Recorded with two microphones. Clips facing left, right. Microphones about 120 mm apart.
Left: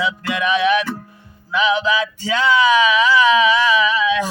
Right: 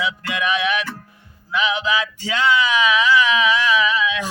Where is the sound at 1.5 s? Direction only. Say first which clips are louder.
Left 4 dB; 35° left (ahead or behind).